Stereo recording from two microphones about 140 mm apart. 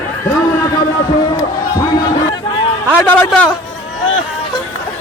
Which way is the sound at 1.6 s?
25° left (ahead or behind).